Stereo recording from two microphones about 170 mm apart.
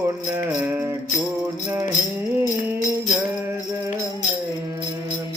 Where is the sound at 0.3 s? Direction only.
10° right (ahead or behind).